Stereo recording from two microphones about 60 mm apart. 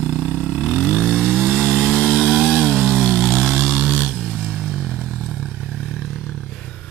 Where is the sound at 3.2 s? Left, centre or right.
Centre.